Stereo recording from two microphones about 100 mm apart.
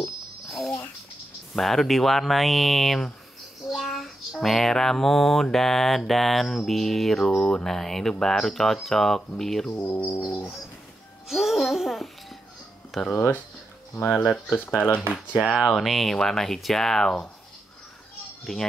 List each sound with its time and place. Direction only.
0.0 s a sound: centre (ahead or behind)
1.5 s child singing: centre (ahead or behind)
9.7 s speech: 25° left (ahead or behind)
11.2 s music: 5° right (ahead or behind)
13.1 s speech: 25° left (ahead or behind)
14.2 s child singing: centre (ahead or behind)
14.8 s speech: 15° left (ahead or behind)
15.5 s child singing: centre (ahead or behind)
18.4 s a child's voice: 5° left (ahead or behind)